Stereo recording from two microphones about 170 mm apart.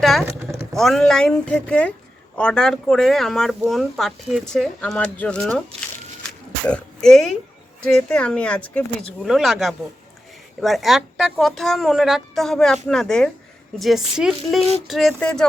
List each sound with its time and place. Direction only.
0.0 s speech: centre (ahead or behind)
0.3 s a sound: 15° right (ahead or behind)
0.7 s speech: centre (ahead or behind)
6.2 s oink: 5° left (ahead or behind)
7.9 s speech: 5° left (ahead or behind)